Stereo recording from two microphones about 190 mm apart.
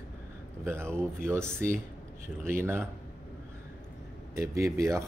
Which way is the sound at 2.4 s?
10° right (ahead or behind).